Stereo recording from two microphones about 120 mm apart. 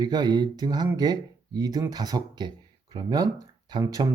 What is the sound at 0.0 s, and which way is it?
Speech, 35° right (ahead or behind).